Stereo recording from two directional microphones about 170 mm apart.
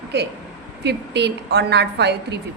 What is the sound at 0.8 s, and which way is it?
A woman's voice, 85° right.